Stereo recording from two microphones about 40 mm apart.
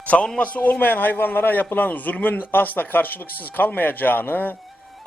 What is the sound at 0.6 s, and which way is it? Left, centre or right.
A man's voice, left.